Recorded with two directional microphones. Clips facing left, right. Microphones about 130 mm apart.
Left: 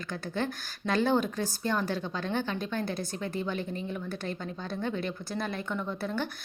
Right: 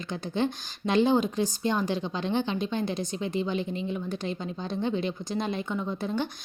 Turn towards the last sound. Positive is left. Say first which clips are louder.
# right 3 dB
turn(degrees=-15)  # may be behind; listen again after turning